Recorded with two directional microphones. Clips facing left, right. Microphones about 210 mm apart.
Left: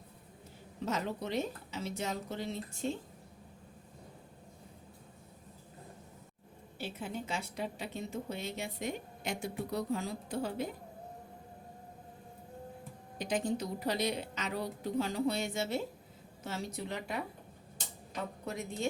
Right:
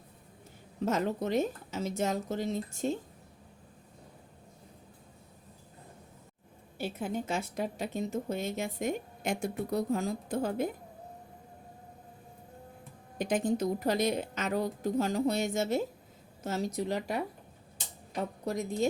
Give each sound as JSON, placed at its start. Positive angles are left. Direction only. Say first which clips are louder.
{"t": 0.9, "sound": "a woman's voice", "louder": "right 6 dB", "side_deg": -50}
{"t": 6.7, "sound": "a woman's voice", "louder": "right 6 dB", "side_deg": -50}
{"t": 13.1, "sound": "a woman's voice", "louder": "right 4 dB", "side_deg": -50}